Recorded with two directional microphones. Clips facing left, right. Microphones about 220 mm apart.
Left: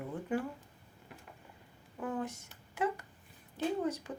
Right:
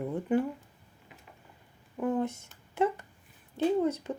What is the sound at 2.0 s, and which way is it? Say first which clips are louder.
Speech: right 8 dB; 25° right (ahead or behind).